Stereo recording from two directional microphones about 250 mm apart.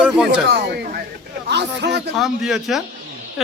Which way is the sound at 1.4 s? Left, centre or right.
Right.